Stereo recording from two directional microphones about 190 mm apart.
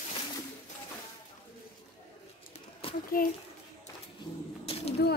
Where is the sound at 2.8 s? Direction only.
30° left (ahead or behind).